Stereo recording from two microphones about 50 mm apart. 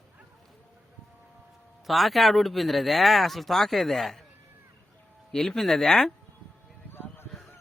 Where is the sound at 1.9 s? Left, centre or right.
Centre.